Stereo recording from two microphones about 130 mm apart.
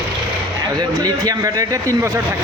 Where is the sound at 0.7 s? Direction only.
30° right (ahead or behind).